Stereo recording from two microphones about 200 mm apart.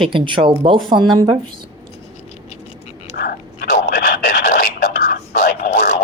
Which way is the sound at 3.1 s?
50° left (ahead or behind).